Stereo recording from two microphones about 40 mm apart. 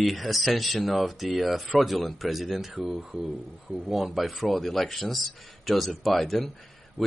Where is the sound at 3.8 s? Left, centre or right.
Centre.